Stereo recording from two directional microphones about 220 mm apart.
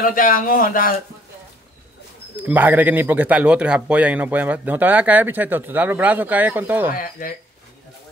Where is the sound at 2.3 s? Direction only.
5° right (ahead or behind).